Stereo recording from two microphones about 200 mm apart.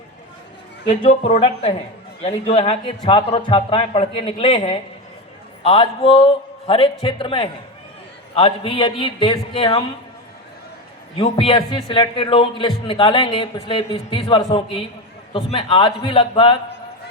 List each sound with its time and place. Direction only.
0.9 s a man's voice: 30° left (ahead or behind)
11.2 s a man's voice: 25° left (ahead or behind)